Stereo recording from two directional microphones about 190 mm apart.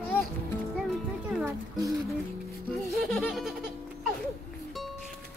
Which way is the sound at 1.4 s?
15° right (ahead or behind).